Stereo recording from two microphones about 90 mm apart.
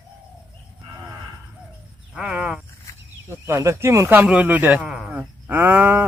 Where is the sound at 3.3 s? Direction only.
30° right (ahead or behind).